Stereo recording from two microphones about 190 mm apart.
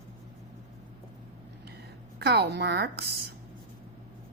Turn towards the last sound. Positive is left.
turn(degrees=-60)  # may be behind; listen again after turning